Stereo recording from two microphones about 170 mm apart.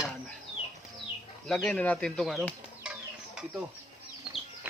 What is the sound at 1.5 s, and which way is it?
Speech, 5° left (ahead or behind).